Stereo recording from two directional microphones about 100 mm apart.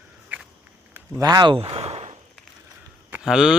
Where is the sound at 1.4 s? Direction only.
65° right (ahead or behind); by 2.1 s 90° right.